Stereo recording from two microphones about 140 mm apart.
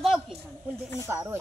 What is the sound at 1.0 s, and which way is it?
Speech, 15° right (ahead or behind).